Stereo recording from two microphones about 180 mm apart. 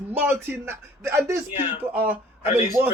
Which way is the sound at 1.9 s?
10° right (ahead or behind).